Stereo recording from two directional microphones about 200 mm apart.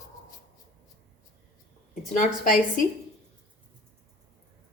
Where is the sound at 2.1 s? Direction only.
40° left (ahead or behind).